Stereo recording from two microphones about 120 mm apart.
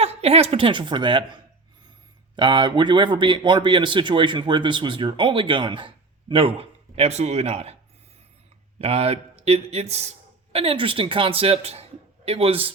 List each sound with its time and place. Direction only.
0.0 s a woman's voice: 55° right (ahead or behind)
6.6 s speech: 60° right (ahead or behind)
8.8 s speech: 55° right (ahead or behind)
10.5 s a man's voice: 50° right (ahead or behind)